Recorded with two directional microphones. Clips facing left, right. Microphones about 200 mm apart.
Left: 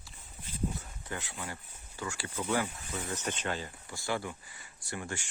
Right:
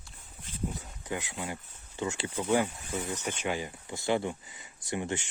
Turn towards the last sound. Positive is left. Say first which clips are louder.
# right 6 dB
turn(degrees=-20)  # may be behind; listen again after turning